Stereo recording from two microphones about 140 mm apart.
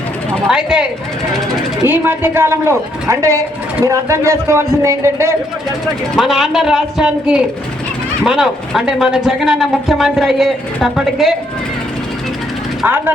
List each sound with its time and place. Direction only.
0.4 s speech: 5° right (ahead or behind)
1.9 s a man's voice: 15° right (ahead or behind)
6.1 s speech: 5° right (ahead or behind)
12.8 s speech: 15° right (ahead or behind)